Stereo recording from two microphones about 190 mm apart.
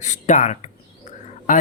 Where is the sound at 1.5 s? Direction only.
45° left (ahead or behind).